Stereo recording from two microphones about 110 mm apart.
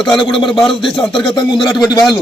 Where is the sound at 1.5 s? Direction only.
Centre (ahead or behind).